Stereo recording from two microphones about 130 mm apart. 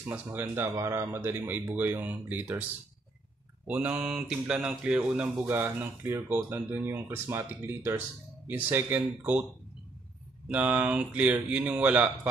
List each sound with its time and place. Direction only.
0.0 s speech: 15° right (ahead or behind)
3.6 s speech: 10° right (ahead or behind)
10.5 s speech: 10° right (ahead or behind)